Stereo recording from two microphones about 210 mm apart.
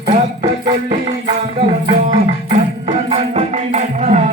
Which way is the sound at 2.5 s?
30° right (ahead or behind).